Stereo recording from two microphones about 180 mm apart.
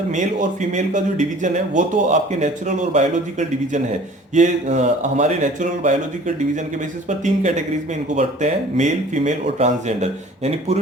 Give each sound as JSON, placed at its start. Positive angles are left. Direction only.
{"t": 0.1, "sound": "speech", "side_deg": -45}
{"t": 8.1, "sound": "speech", "side_deg": -40}